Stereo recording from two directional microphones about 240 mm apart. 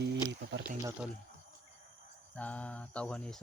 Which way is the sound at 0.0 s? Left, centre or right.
Right.